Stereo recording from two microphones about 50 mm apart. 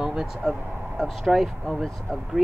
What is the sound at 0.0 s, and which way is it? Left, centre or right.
Vehicle, centre.